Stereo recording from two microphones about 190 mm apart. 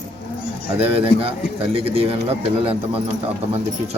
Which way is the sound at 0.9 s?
30° right (ahead or behind).